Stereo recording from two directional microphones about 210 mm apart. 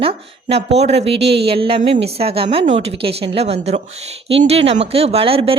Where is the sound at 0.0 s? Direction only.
25° right (ahead or behind).